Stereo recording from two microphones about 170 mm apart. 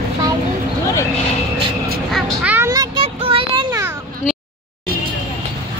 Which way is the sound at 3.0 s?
35° right (ahead or behind).